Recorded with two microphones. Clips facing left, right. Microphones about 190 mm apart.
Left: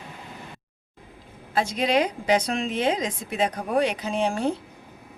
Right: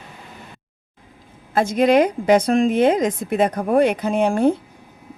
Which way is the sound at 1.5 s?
50° right (ahead or behind).